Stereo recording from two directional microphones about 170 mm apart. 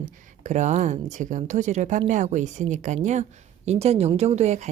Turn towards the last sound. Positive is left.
turn(degrees=-45)  # may be behind; listen again after turning